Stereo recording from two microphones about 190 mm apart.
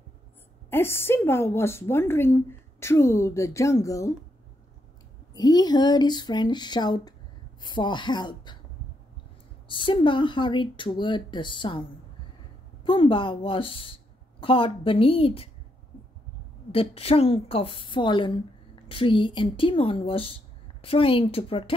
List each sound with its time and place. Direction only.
0.7 s a woman's voice: 10° left (ahead or behind)
5.3 s speech: 20° left (ahead or behind)
9.7 s speech: 25° left (ahead or behind)
12.8 s speech: 25° left (ahead or behind)
16.7 s speech: 30° left (ahead or behind)